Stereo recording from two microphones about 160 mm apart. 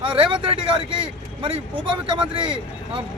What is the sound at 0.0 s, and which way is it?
A man's voice, 30° right (ahead or behind).